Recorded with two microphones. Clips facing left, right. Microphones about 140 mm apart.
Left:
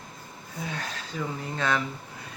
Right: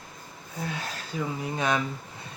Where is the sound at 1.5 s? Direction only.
15° right (ahead or behind).